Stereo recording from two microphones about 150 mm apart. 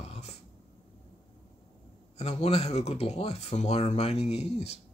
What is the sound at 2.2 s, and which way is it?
Speech, 45° left (ahead or behind).